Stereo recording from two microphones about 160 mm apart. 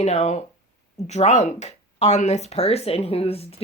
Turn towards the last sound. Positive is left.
turn(degrees=40)  # may be behind; listen again after turning